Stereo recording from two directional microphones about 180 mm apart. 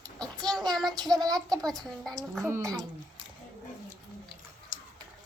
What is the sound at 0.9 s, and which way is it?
Speech, 20° right (ahead or behind).